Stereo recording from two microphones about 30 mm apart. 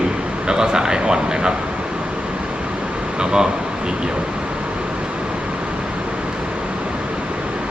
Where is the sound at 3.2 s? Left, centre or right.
Right.